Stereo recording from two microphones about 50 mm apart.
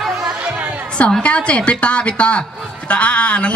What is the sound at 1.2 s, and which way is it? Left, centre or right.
Speech, left.